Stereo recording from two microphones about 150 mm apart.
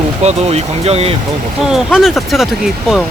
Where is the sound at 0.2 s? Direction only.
45° right (ahead or behind).